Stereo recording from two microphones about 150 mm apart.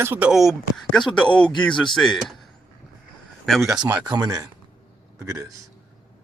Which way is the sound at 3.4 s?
Centre (ahead or behind).